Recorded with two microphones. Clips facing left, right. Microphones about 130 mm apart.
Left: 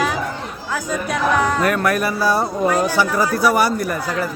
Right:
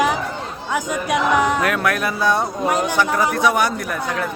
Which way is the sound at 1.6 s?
Centre (ahead or behind).